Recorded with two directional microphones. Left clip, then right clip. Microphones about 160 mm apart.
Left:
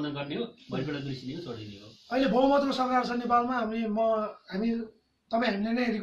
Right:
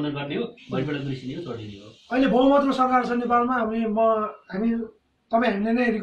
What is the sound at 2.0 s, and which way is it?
A man's voice, 20° left (ahead or behind).